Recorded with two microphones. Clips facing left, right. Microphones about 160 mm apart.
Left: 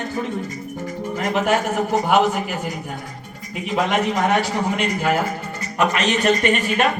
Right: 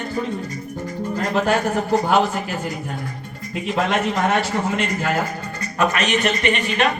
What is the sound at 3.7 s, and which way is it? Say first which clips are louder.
Speech: left 1 dB; 15° left (ahead or behind).